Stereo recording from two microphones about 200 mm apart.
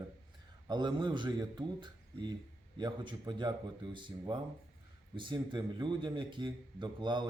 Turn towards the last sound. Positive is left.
turn(degrees=-25)  # may be behind; listen again after turning